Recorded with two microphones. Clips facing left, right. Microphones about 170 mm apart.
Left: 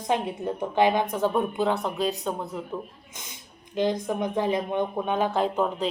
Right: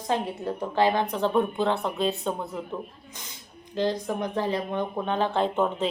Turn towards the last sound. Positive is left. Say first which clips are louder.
# even
turn(degrees=0)  # may be behind; listen again after turning